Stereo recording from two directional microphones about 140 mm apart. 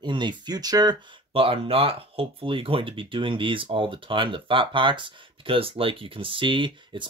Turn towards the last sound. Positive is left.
turn(degrees=-35)  # may be behind; listen again after turning